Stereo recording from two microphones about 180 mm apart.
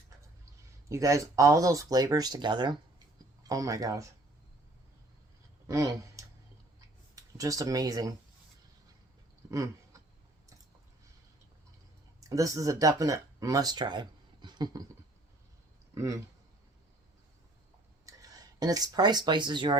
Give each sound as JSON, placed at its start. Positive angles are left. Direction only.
{"t": 0.9, "sound": "speech", "side_deg": -15}
{"t": 5.6, "sound": "speech", "side_deg": -20}
{"t": 9.5, "sound": "a sound", "side_deg": -20}
{"t": 12.3, "sound": "speech", "side_deg": -20}
{"t": 16.0, "sound": "speech", "side_deg": -15}
{"t": 18.0, "sound": "speech", "side_deg": -20}